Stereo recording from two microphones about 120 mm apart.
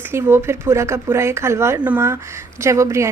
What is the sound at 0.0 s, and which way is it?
A woman's voice, 20° right (ahead or behind).